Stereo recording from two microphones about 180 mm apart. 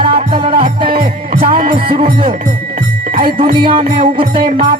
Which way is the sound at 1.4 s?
30° right (ahead or behind).